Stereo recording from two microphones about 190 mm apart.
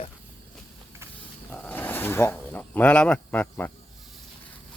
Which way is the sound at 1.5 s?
10° left (ahead or behind).